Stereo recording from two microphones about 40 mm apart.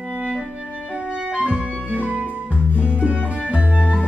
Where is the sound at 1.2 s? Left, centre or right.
Right.